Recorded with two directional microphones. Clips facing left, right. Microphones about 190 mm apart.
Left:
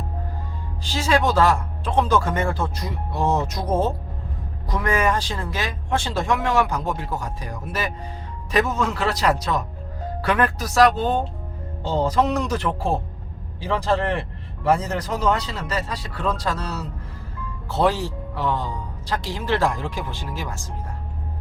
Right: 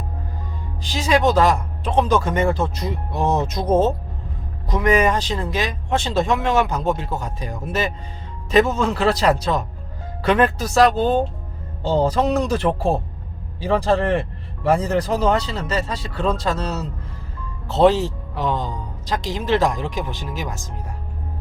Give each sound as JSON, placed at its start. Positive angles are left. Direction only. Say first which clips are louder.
{"t": 0.8, "sound": "speech", "louder": "right 2 dB", "side_deg": -15}